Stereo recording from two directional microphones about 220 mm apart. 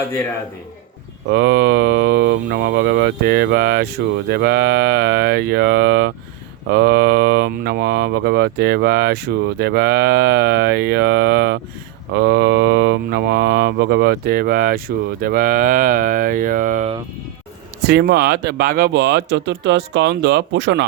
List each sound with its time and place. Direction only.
1.3 s speech: 50° right (ahead or behind)
17.8 s speech: 45° right (ahead or behind)